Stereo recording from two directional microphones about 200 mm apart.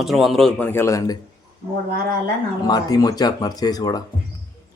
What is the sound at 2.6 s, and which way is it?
Speech, 20° left (ahead or behind).